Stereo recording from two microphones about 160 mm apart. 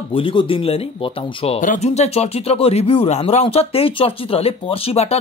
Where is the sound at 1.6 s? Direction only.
50° left (ahead or behind).